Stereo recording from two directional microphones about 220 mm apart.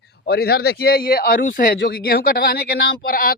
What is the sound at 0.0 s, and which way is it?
A man's voice, 45° left (ahead or behind).